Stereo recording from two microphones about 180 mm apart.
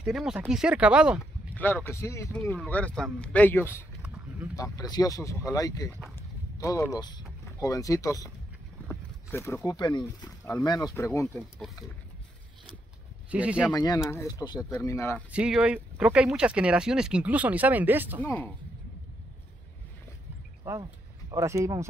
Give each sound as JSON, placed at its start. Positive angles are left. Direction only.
{"t": 0.0, "sound": "speech", "side_deg": -5}
{"t": 1.5, "sound": "speech", "side_deg": 10}
{"t": 13.3, "sound": "speech", "side_deg": -5}
{"t": 13.7, "sound": "speech", "side_deg": 20}
{"t": 15.3, "sound": "speech", "side_deg": -5}
{"t": 18.2, "sound": "speech", "side_deg": 10}
{"t": 20.6, "sound": "speech", "side_deg": -20}